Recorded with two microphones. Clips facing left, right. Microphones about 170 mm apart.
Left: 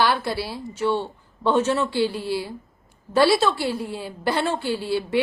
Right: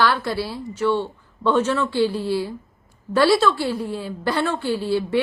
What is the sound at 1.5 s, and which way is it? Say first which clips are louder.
Speech: right 1 dB; 25° left (ahead or behind).